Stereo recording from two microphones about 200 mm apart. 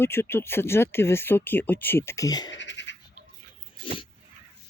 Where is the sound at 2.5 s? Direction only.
65° left (ahead or behind).